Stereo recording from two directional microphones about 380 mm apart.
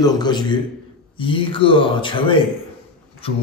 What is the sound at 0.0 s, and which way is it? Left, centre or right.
Speech, centre.